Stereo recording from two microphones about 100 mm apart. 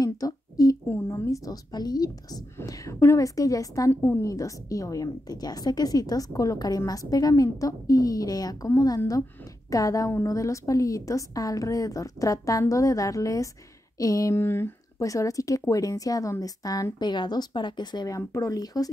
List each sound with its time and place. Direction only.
0.0 s a sound: 35° left (ahead or behind)
0.9 s a woman's voice: 25° left (ahead or behind)
3.9 s a woman's voice: 25° left (ahead or behind)
14.3 s a woman's voice: 25° left (ahead or behind); by 18.9 s 40° left (ahead or behind)